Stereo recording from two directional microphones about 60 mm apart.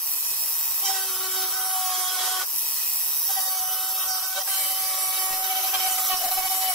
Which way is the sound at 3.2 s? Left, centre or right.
Centre.